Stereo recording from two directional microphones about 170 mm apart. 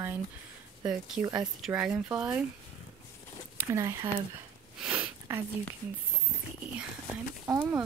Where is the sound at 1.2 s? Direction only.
10° right (ahead or behind).